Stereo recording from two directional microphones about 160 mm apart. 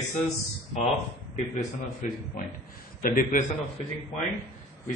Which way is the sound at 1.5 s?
50° left (ahead or behind).